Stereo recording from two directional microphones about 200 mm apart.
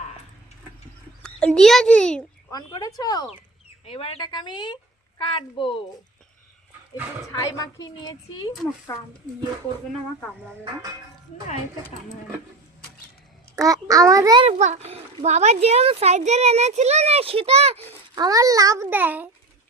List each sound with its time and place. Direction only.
1.2 s a child's voice: 5° left (ahead or behind)
2.5 s a woman's voice: 20° left (ahead or behind)
3.8 s a woman's voice: 30° left (ahead or behind)
7.3 s a woman's voice: 20° left (ahead or behind)
13.6 s a child's voice: 15° right (ahead or behind)
14.4 s a child's voice: 35° right (ahead or behind)
18.1 s a child's voice: 20° right (ahead or behind)